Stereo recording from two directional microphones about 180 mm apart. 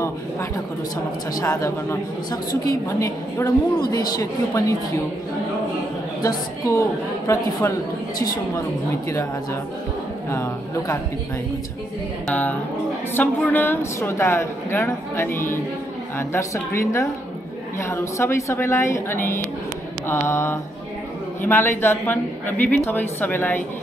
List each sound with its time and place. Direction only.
1.4 s a woman's voice: 15° left (ahead or behind)
6.2 s a woman's voice: 20° left (ahead or behind)
10.3 s a woman's voice: 15° left (ahead or behind)
12.3 s a woman's voice: 10° left (ahead or behind)